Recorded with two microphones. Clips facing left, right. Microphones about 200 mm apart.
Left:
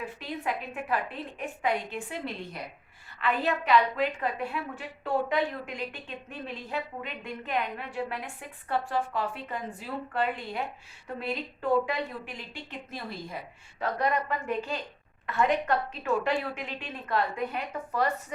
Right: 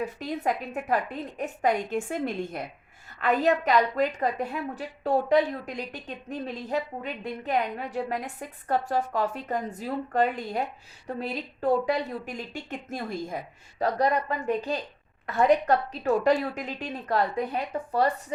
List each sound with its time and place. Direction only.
0.0 s a woman's voice: 40° right (ahead or behind)